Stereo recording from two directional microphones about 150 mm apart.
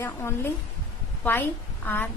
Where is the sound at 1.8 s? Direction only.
10° left (ahead or behind).